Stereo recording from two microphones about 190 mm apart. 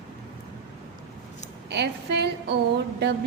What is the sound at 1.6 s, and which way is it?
Speech, 60° right (ahead or behind).